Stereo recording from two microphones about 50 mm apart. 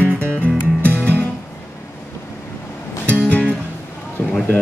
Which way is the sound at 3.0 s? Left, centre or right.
Left.